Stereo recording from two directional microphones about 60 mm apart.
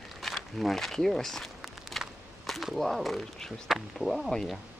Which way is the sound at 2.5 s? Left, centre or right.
Centre.